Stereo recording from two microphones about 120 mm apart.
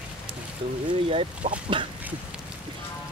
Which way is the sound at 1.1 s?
50° right (ahead or behind).